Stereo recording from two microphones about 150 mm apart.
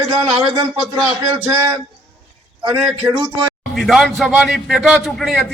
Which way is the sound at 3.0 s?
10° right (ahead or behind).